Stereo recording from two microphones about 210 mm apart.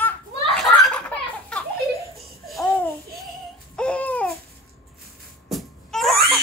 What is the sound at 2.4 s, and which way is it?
Babbling, centre (ahead or behind).